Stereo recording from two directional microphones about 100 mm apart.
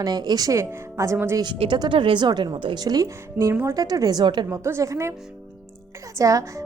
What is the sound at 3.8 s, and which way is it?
Speech, 40° right (ahead or behind).